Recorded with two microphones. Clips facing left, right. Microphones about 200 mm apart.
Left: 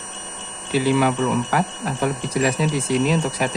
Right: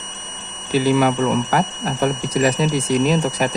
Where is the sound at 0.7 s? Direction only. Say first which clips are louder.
Right 2 dB; 45° right (ahead or behind).